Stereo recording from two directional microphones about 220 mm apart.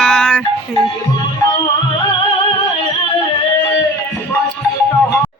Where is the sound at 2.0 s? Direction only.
20° left (ahead or behind).